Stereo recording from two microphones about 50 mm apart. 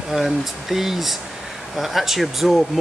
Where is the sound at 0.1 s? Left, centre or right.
Centre.